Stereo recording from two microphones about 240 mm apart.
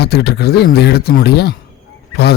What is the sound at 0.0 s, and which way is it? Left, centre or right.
Speech, left.